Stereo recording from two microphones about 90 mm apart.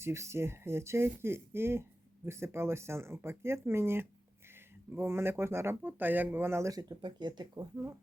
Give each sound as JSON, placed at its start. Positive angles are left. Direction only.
{"t": 0.0, "sound": "speech", "side_deg": -30}
{"t": 6.7, "sound": "speech", "side_deg": -45}